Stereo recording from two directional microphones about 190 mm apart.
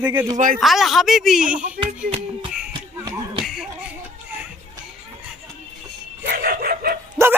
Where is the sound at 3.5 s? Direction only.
Centre (ahead or behind).